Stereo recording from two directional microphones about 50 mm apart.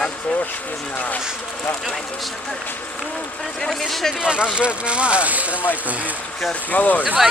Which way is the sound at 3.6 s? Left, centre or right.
Centre.